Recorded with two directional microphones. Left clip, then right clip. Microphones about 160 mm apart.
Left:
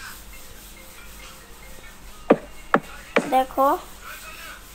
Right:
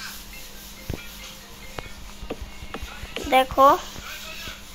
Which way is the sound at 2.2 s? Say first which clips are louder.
Left 17 dB; centre (ahead or behind).